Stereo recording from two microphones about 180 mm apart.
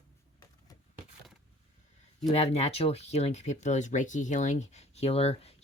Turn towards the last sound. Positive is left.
turn(degrees=35)  # may be behind; listen again after turning